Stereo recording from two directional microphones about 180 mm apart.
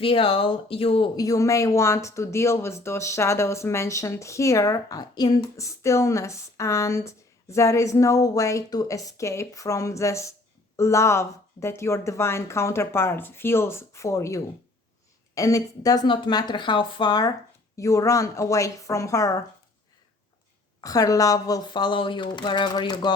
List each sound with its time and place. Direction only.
0.0 s speech: 30° left (ahead or behind)
20.8 s speech: 20° left (ahead or behind)